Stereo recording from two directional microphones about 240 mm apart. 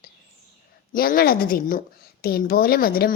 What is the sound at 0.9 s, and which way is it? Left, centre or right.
A woman's voice, left.